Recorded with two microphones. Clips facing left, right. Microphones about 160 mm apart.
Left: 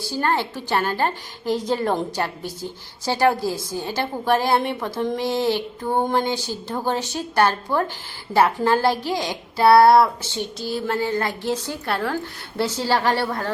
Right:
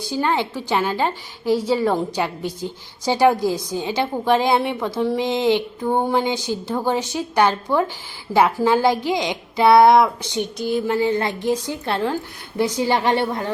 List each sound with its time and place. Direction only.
0.0 s a woman's voice: 15° right (ahead or behind)
11.1 s a woman's voice: 20° right (ahead or behind)